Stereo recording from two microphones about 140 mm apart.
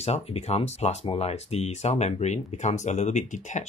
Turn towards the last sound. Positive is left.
turn(degrees=60)  # may be behind; listen again after turning